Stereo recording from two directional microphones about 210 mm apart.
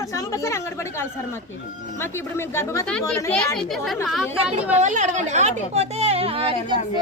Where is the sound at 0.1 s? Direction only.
15° left (ahead or behind); by 4.5 s 5° right (ahead or behind).